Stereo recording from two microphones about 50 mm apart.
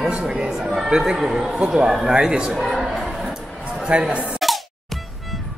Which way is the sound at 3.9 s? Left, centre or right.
Centre.